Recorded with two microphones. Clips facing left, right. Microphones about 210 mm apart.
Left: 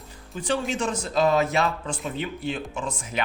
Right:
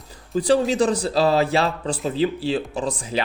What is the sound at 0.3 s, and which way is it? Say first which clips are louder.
Speech: right 9 dB; 35° right (ahead or behind).